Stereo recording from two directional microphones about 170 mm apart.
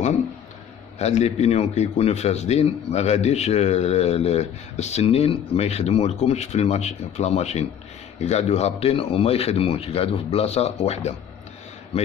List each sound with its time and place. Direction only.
0.9 s a man's voice: 40° left (ahead or behind)